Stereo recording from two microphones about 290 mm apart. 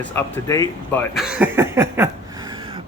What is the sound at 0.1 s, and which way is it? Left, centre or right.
Speech, centre.